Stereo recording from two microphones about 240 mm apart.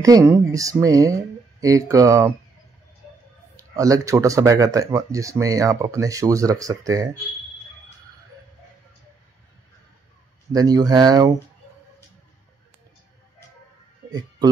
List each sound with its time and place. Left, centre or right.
0.0 s speech: centre
3.5 s speech: centre
10.5 s speech: centre